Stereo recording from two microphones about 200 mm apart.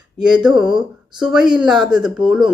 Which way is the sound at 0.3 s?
5° right (ahead or behind).